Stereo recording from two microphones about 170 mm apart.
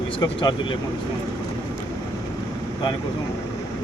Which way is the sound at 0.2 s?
25° left (ahead or behind).